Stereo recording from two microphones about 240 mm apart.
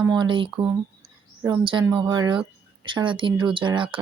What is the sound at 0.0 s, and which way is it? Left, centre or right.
Speech, centre.